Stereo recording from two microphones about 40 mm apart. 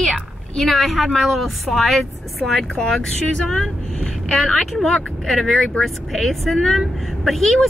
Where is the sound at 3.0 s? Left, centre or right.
Left.